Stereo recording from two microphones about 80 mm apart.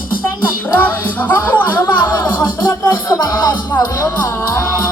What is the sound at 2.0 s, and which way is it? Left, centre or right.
Music, left.